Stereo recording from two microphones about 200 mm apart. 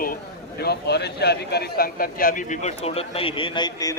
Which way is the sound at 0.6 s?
55° left (ahead or behind).